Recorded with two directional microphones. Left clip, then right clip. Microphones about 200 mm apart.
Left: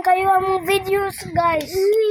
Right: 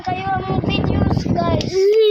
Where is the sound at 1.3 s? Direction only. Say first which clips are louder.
Left 3 dB; 65° left (ahead or behind).